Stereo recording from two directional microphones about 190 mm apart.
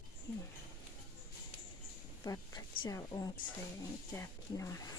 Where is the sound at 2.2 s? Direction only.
20° left (ahead or behind).